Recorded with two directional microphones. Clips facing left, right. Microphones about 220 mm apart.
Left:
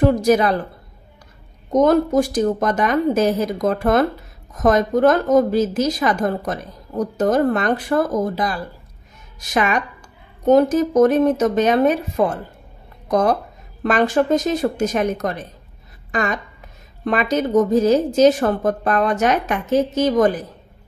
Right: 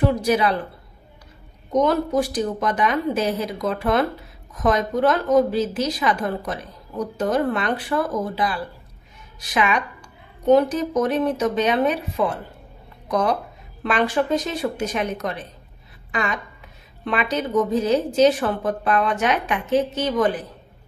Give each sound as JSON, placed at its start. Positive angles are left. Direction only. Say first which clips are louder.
{"t": 0.0, "sound": "a woman's voice", "louder": "left 4 dB", "side_deg": 45}
{"t": 1.7, "sound": "a woman's voice", "louder": "left 5 dB", "side_deg": 45}